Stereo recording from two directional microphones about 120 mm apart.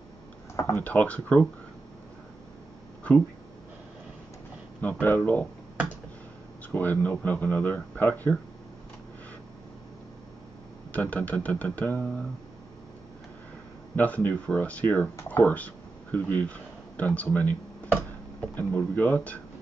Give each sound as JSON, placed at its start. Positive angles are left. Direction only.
{"t": 0.6, "sound": "speech", "side_deg": 20}
{"t": 3.0, "sound": "a sound", "side_deg": 10}
{"t": 5.0, "sound": "speech", "side_deg": 15}
{"t": 6.7, "sound": "speech", "side_deg": 15}
{"t": 10.9, "sound": "speech", "side_deg": 15}
{"t": 13.9, "sound": "speech", "side_deg": 15}